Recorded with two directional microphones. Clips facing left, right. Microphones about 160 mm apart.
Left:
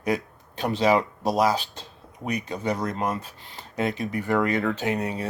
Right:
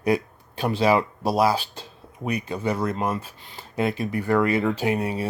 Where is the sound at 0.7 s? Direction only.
10° right (ahead or behind).